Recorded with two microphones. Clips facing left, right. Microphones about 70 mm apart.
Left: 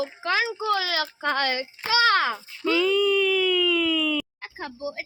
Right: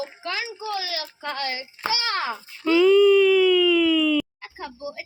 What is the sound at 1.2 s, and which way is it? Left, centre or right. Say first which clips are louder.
Child singing: left 5 dB; left.